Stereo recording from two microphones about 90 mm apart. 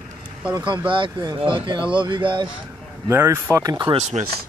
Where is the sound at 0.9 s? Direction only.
55° right (ahead or behind).